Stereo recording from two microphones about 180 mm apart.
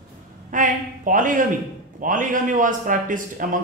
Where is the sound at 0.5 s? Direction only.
45° right (ahead or behind).